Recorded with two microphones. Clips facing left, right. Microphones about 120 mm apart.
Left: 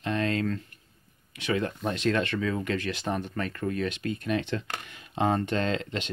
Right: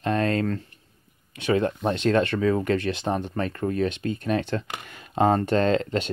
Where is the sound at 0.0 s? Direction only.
45° right (ahead or behind).